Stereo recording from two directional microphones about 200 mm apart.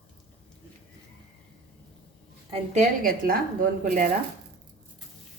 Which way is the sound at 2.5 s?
35° right (ahead or behind).